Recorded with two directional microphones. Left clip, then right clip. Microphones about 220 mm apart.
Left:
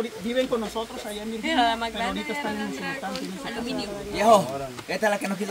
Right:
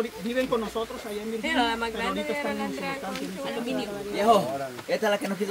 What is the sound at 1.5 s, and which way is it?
Speech, 5° left (ahead or behind).